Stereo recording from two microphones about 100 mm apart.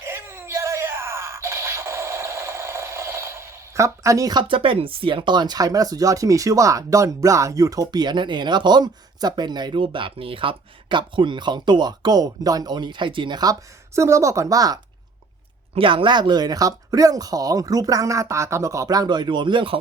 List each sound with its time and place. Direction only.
0.0 s a sound: 25° right (ahead or behind)
4.4 s speech: 60° right (ahead or behind); by 14.8 s 40° right (ahead or behind)
15.7 s speech: 60° right (ahead or behind)